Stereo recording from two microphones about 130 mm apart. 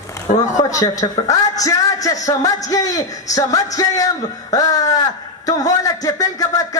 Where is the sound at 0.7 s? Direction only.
25° left (ahead or behind).